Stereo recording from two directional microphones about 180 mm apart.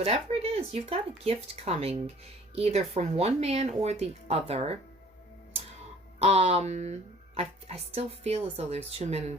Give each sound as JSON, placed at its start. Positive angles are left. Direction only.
{"t": 0.0, "sound": "speech", "side_deg": -35}
{"t": 6.1, "sound": "speech", "side_deg": -35}